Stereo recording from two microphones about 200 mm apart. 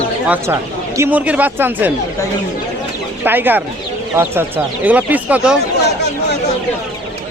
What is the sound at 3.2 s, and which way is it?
Speech, 10° right (ahead or behind).